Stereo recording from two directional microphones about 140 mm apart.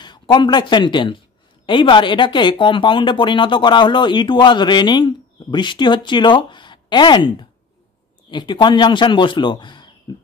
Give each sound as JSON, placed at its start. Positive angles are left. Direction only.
{"t": 0.0, "sound": "speech", "side_deg": 30}